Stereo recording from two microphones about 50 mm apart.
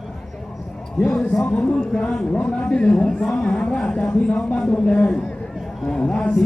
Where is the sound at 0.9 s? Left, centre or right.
Left.